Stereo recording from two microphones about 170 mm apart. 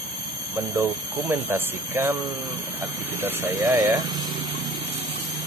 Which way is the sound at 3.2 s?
10° right (ahead or behind).